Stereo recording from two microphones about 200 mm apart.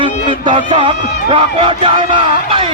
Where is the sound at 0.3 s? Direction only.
25° right (ahead or behind).